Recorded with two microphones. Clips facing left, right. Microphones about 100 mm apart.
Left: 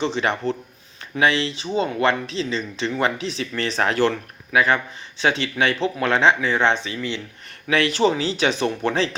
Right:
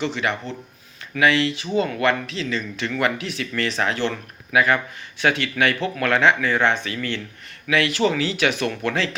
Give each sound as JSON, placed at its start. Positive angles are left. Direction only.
{"t": 0.0, "sound": "speech", "side_deg": 30}
{"t": 5.2, "sound": "speech", "side_deg": 25}
{"t": 7.7, "sound": "speech", "side_deg": 35}